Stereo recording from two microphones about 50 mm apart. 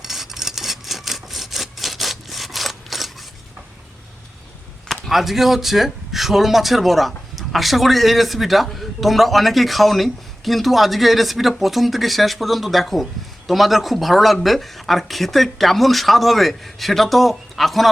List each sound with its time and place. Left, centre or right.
0.0 s sawing: centre
4.9 s speech: centre